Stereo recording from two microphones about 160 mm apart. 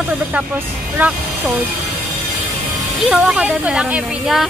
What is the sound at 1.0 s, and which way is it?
Speech, 10° right (ahead or behind).